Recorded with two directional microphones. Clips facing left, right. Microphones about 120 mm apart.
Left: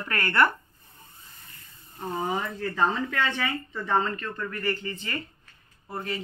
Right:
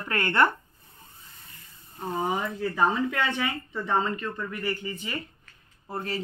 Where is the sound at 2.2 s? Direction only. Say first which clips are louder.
Right 1 dB; 15° right (ahead or behind).